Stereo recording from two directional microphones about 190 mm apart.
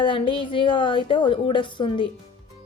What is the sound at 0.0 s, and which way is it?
A woman's voice, 25° left (ahead or behind).